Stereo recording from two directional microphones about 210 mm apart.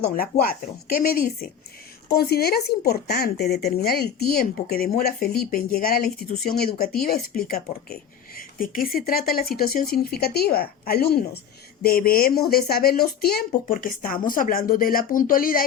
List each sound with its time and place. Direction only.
0.2 s speech: 45° left (ahead or behind)